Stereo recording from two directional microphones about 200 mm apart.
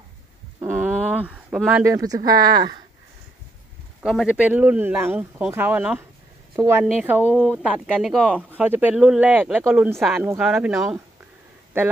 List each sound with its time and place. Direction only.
0.6 s a sound: 10° right (ahead or behind)
1.2 s speech: 5° right (ahead or behind)
4.0 s speech: centre (ahead or behind); by 6.8 s 15° right (ahead or behind)
6.8 s speech: 5° right (ahead or behind)
8.5 s speech: 10° right (ahead or behind)